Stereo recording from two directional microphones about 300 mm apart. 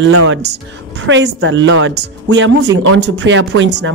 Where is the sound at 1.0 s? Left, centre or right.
Right.